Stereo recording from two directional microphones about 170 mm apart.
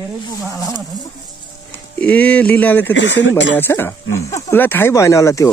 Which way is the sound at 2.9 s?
90° left.